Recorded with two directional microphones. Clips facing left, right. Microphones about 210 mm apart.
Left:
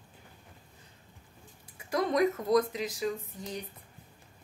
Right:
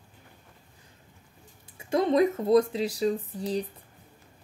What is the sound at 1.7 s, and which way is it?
Speech, 25° right (ahead or behind).